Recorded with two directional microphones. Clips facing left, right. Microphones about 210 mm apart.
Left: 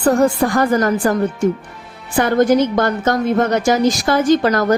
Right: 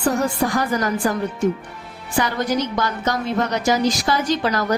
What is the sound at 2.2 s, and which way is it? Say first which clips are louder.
A woman's voice: left 8 dB; 50° left (ahead or behind).